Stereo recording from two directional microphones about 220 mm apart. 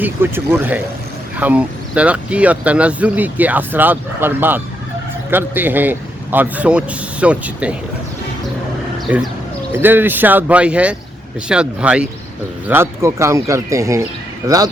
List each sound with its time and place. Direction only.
0.0 s speech: 10° right (ahead or behind)
9.1 s speech: 5° right (ahead or behind)